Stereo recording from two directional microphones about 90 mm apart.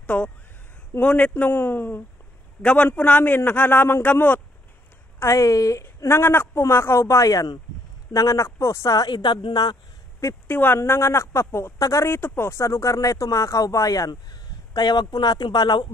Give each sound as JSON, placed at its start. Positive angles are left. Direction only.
{"t": 0.0, "sound": "a man's voice", "side_deg": 15}
{"t": 5.2, "sound": "a woman's voice", "side_deg": 35}
{"t": 6.0, "sound": "a man's voice", "side_deg": 25}
{"t": 10.5, "sound": "a man's voice", "side_deg": 20}